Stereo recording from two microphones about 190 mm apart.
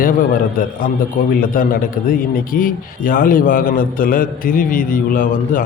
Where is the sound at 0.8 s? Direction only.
50° left (ahead or behind).